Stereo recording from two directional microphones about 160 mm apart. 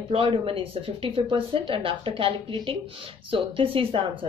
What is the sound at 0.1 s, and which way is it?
Speech, 35° right (ahead or behind).